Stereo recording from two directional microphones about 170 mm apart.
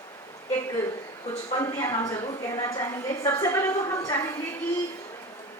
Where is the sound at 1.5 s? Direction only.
15° left (ahead or behind).